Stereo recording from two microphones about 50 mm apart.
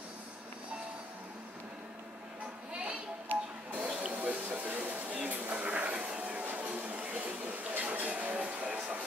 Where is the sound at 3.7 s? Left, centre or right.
Right.